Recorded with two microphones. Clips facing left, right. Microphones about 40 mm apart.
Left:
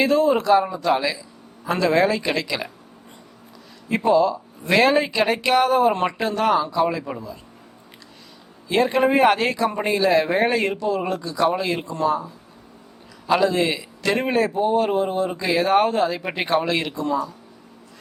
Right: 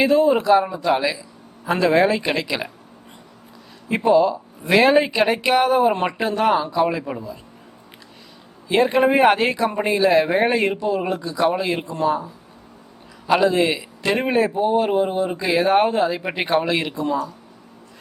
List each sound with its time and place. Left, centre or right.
0.0 s speech: centre
3.8 s speech: centre
8.7 s a man's voice: centre